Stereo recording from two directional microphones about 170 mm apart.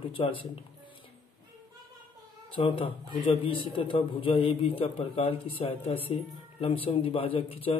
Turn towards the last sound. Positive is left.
turn(degrees=30)  # may be behind; listen again after turning